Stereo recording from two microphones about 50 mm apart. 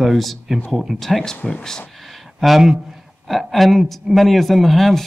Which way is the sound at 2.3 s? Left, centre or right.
Centre.